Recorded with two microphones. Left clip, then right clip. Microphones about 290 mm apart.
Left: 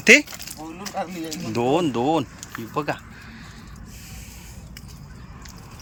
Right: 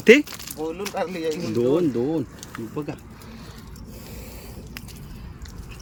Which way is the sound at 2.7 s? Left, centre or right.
Left.